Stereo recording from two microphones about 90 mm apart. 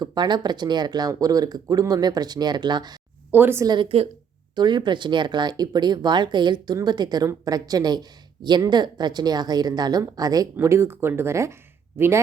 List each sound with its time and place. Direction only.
0.0 s speech: 55° right (ahead or behind)
3.3 s speech: 20° right (ahead or behind)
3.7 s a woman's voice: 75° right (ahead or behind)
4.5 s speech: 55° right (ahead or behind)
10.6 s speech: 30° right (ahead or behind)